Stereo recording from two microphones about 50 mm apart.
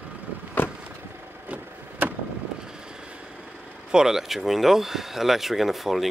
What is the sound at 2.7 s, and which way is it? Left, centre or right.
Vehicle, centre.